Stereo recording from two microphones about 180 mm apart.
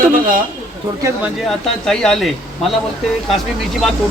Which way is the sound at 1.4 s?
Centre (ahead or behind).